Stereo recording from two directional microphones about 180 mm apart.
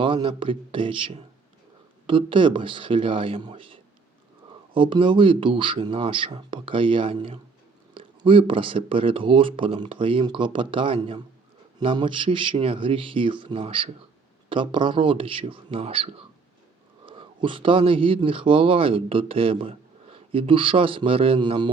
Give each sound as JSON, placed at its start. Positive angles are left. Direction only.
{"t": 0.0, "sound": "a man's voice", "side_deg": -30}